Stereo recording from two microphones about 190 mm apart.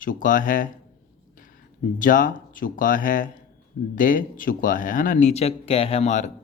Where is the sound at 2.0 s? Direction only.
45° left (ahead or behind).